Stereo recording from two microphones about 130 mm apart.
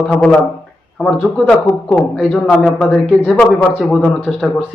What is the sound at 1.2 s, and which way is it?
A man's voice, 5° left (ahead or behind).